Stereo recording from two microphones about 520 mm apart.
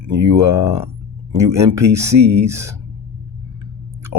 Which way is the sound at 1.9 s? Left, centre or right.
Centre.